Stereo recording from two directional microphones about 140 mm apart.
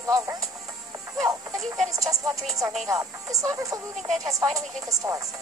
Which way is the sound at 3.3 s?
25° right (ahead or behind).